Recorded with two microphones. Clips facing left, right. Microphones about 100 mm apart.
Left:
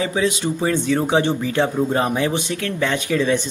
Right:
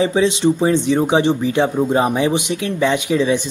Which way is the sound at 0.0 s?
25° right (ahead or behind).